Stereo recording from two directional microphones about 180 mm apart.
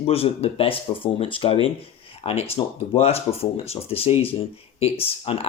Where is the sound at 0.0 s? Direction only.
35° left (ahead or behind).